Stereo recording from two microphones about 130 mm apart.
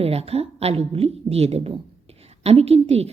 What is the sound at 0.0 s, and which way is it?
A woman's voice, 50° right (ahead or behind).